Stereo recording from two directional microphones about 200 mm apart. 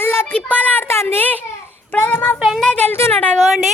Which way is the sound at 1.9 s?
10° left (ahead or behind).